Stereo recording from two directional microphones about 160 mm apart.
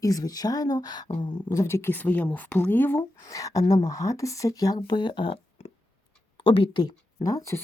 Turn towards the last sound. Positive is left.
turn(degrees=20)  # may be behind; listen again after turning